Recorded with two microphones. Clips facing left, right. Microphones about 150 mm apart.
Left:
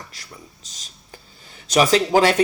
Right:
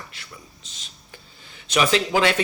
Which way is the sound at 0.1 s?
40° left (ahead or behind).